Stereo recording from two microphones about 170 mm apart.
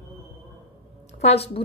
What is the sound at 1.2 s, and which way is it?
Speech, 35° left (ahead or behind).